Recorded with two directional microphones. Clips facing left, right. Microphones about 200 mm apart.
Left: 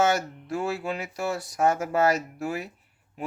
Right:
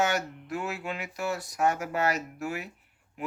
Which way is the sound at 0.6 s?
35° left (ahead or behind).